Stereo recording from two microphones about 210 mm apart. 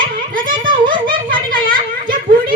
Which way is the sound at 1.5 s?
40° right (ahead or behind).